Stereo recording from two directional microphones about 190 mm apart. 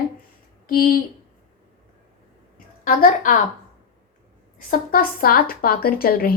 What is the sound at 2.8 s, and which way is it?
Speech, 45° left (ahead or behind).